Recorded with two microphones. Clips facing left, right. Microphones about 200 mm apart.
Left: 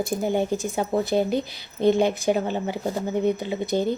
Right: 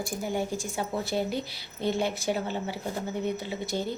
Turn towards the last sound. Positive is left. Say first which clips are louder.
# left 7 dB
turn(degrees=20)  # may be behind; listen again after turning